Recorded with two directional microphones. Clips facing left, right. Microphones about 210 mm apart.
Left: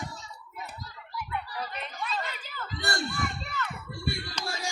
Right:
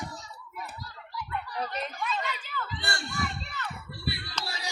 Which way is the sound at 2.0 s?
35° left (ahead or behind).